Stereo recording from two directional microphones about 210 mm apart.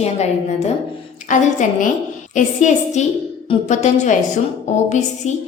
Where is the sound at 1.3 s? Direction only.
35° left (ahead or behind).